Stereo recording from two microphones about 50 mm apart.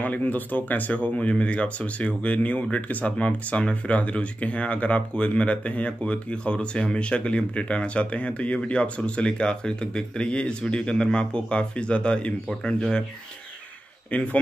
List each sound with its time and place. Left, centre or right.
0.0 s speech: left
14.1 s speech: left